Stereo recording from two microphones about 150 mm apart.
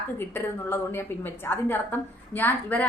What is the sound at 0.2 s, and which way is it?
A woman's voice, 15° left (ahead or behind).